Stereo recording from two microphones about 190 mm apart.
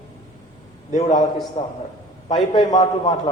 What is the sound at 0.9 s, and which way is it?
Speech, 35° left (ahead or behind).